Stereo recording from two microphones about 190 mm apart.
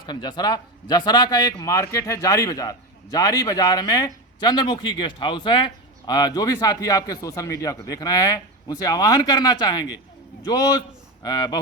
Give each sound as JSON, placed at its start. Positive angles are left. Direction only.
{"t": 0.0, "sound": "speech", "side_deg": 20}